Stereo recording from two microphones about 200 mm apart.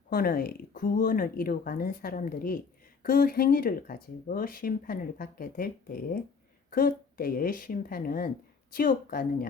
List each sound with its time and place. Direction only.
0.1 s speech: 45° left (ahead or behind)